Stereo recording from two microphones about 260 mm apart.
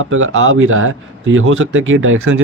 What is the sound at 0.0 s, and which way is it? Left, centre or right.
A man's voice, right.